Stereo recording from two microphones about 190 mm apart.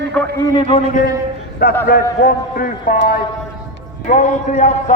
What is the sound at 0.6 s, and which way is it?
Speech, 30° left (ahead or behind).